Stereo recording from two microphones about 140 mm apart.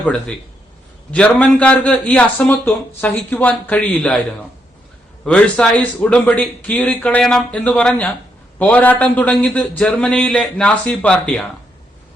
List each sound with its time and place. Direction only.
0.0 s speech: 5° left (ahead or behind)
5.2 s speech: 5° left (ahead or behind)